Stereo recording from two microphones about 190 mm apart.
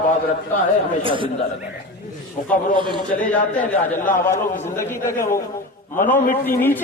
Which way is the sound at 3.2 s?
10° left (ahead or behind).